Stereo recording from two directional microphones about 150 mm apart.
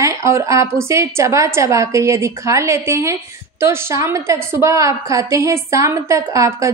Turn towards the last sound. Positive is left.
turn(degrees=-20)  # may be behind; listen again after turning